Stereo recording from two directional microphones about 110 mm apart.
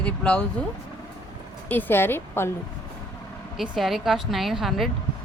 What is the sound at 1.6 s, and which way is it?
Speech, 15° left (ahead or behind).